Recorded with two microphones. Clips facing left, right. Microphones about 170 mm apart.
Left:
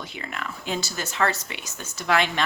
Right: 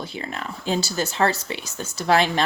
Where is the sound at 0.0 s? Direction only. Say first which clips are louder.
Right 3 dB; 35° right (ahead or behind).